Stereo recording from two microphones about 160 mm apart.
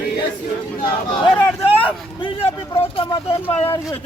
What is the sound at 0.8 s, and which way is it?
Chatter, 30° left (ahead or behind).